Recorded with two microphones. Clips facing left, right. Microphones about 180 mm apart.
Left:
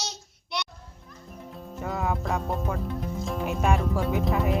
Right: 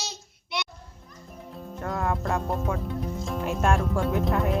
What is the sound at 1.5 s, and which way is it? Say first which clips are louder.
Speech: right 1 dB; centre (ahead or behind).